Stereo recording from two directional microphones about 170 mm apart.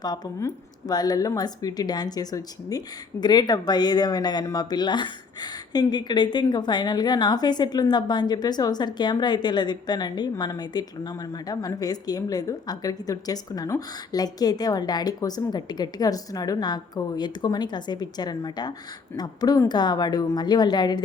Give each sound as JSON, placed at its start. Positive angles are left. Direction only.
{"t": 0.0, "sound": "speech", "side_deg": 20}